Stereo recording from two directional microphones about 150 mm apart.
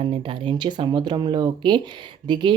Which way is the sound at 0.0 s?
40° right (ahead or behind).